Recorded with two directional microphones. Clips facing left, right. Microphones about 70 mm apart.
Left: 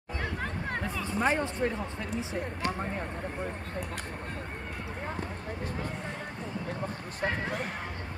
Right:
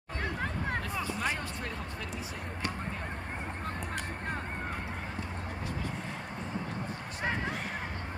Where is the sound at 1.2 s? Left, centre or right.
Left.